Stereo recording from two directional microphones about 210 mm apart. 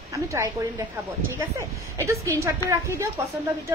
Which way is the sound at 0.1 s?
15° right (ahead or behind).